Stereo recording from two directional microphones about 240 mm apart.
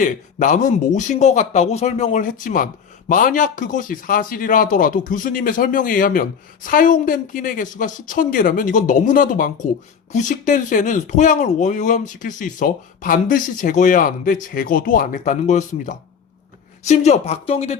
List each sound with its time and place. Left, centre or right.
0.0 s speech: left